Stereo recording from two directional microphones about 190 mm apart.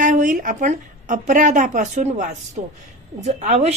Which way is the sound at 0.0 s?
45° right (ahead or behind).